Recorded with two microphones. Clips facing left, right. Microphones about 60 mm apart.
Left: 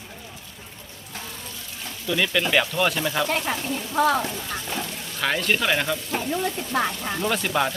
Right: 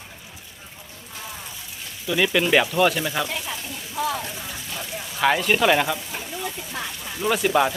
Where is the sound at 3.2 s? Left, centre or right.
Left.